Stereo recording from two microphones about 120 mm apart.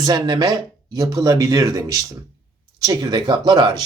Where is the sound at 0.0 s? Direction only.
35° right (ahead or behind).